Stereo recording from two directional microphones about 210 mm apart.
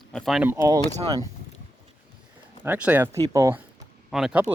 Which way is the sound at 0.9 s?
30° right (ahead or behind).